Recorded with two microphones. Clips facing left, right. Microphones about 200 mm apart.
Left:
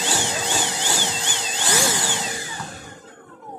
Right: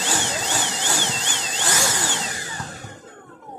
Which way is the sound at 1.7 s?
20° left (ahead or behind).